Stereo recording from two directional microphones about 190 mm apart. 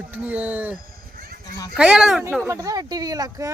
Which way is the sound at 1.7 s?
5° right (ahead or behind).